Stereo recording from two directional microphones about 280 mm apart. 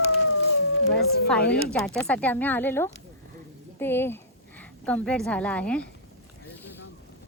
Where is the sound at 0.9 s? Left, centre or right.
Left.